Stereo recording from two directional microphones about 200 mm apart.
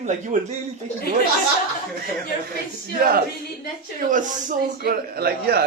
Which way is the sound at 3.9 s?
40° right (ahead or behind).